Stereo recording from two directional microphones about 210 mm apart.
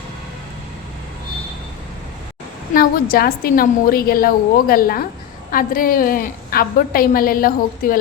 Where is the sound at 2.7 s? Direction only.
45° left (ahead or behind).